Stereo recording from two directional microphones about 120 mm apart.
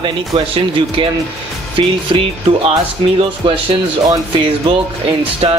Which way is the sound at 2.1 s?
45° right (ahead or behind).